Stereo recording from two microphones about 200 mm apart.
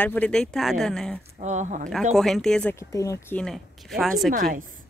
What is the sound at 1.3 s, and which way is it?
Speech, 35° right (ahead or behind).